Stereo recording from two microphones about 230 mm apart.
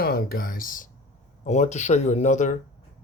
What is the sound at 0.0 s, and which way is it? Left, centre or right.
Speech, left.